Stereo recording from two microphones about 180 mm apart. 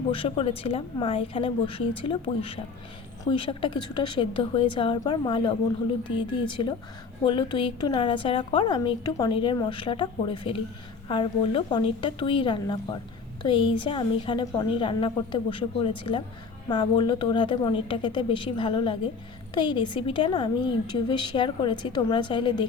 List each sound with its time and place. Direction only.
0.1 s a woman's voice: 30° left (ahead or behind)